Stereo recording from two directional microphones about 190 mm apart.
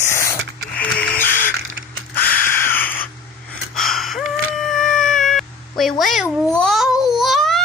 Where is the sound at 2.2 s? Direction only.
50° left (ahead or behind).